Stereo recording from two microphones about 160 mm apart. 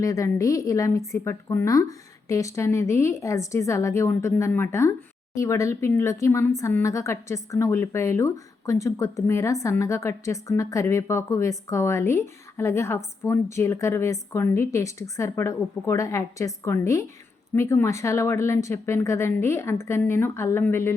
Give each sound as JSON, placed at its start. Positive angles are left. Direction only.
{"t": 0.0, "sound": "a woman's voice", "side_deg": 20}